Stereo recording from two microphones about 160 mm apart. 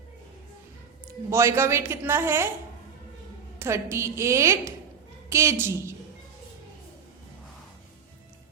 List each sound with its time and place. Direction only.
1.3 s a man's voice: 15° right (ahead or behind)
3.6 s a man's voice: 15° right (ahead or behind)